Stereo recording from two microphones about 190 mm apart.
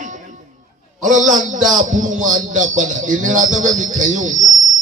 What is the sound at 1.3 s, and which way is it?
A man's voice, 40° right (ahead or behind).